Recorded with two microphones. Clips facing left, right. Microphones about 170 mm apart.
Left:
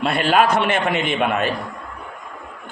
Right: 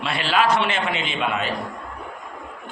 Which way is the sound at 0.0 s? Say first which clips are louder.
Left 4 dB; 50° left (ahead or behind).